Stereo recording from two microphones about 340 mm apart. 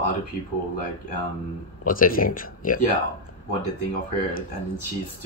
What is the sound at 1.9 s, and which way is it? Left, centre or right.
Speech, left.